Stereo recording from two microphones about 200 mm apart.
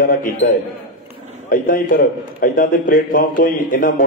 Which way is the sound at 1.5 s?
45° left (ahead or behind).